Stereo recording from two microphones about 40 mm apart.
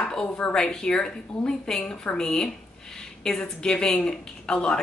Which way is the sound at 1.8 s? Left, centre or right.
Left.